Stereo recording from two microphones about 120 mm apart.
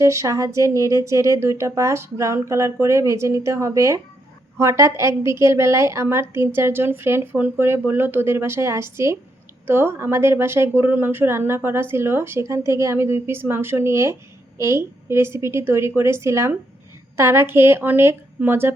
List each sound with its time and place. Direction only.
0.0 s a woman's voice: 25° right (ahead or behind)